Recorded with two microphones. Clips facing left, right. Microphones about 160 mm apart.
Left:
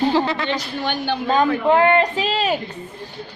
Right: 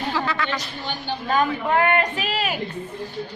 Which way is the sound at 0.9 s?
70° left (ahead or behind).